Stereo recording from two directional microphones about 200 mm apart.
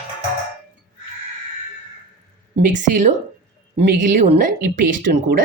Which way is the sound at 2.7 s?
40° right (ahead or behind).